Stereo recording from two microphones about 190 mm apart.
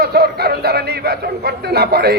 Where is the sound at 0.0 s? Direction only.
55° right (ahead or behind).